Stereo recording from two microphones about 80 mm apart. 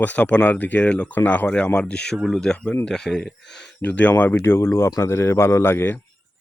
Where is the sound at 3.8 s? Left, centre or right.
Centre.